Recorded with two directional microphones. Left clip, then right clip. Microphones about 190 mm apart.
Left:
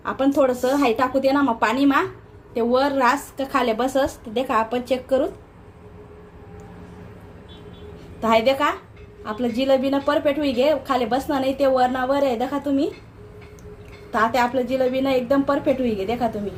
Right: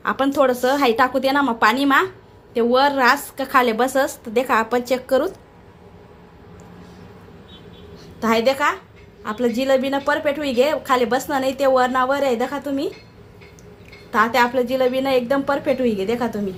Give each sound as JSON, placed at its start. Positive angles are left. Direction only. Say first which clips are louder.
{"t": 0.0, "sound": "a woman's voice", "louder": "right 2 dB", "side_deg": -20}
{"t": 8.2, "sound": "a woman's voice", "louder": "even", "side_deg": -20}
{"t": 14.1, "sound": "a woman's voice", "louder": "right 3 dB", "side_deg": -20}